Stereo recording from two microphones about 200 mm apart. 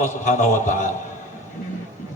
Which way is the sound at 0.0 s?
40° left (ahead or behind).